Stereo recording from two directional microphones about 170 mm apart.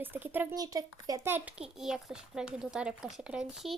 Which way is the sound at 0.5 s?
20° right (ahead or behind).